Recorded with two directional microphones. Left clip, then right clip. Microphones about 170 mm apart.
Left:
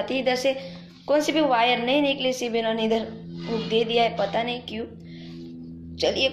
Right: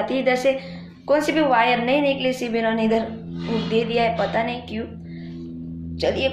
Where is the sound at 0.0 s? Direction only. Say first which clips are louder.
Right 4 dB; 25° left (ahead or behind).